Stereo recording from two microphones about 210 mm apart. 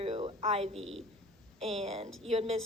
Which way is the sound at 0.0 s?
30° right (ahead or behind).